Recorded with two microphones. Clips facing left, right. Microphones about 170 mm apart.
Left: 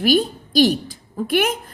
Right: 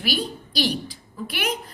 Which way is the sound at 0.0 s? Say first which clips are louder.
Left 10 dB; 45° left (ahead or behind).